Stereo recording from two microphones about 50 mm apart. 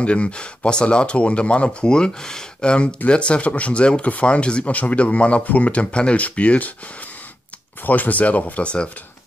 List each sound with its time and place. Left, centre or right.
0.0 s speech: left
7.8 s speech: left